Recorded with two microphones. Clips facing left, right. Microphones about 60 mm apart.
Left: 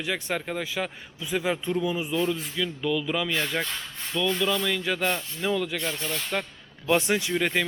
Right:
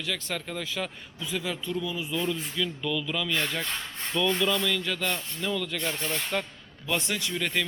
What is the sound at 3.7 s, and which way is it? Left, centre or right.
A man's voice, centre.